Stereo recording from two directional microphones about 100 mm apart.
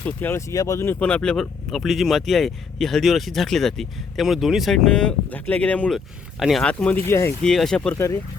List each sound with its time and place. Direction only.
0.0 s speech: 20° left (ahead or behind)
0.5 s speech: 35° left (ahead or behind)
0.9 s speech: 15° left (ahead or behind)
7.1 s speech: 25° left (ahead or behind)
7.4 s speech: 5° left (ahead or behind)
7.9 s speech: 30° left (ahead or behind)